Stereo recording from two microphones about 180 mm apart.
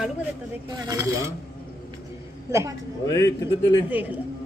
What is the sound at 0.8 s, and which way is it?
Speech, 20° right (ahead or behind).